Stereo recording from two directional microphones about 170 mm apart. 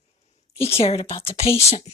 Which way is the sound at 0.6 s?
35° left (ahead or behind).